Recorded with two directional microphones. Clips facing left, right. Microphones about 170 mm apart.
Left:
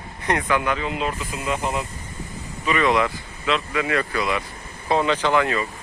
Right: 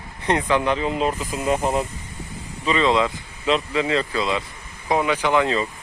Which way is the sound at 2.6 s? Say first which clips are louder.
Right 1 dB; 20° right (ahead or behind).